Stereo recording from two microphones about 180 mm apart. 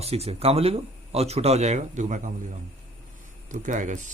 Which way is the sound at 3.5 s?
45° right (ahead or behind).